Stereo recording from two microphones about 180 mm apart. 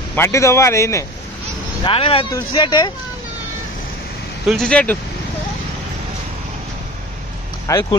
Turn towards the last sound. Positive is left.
turn(degrees=15)  # may be behind; listen again after turning